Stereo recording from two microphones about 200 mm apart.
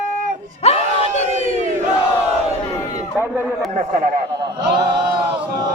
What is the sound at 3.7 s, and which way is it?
Speech, 45° right (ahead or behind).